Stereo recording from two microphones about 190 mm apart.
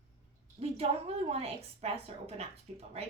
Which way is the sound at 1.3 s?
30° right (ahead or behind).